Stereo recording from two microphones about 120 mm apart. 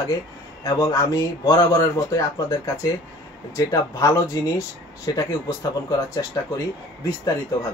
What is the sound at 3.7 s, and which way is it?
A man's voice, 30° left (ahead or behind).